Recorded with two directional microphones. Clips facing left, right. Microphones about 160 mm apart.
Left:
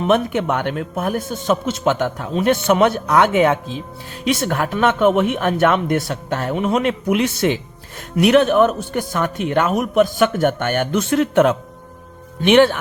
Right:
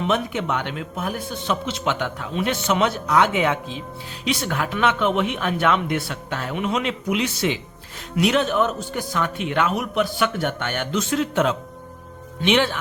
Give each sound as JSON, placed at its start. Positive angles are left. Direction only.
{"t": 0.0, "sound": "a man's voice", "side_deg": 50}